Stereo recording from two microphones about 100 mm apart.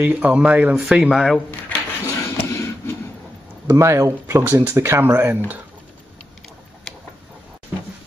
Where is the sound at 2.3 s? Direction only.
25° left (ahead or behind).